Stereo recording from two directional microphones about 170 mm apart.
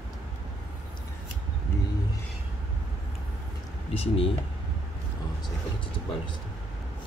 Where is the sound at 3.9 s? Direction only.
35° left (ahead or behind).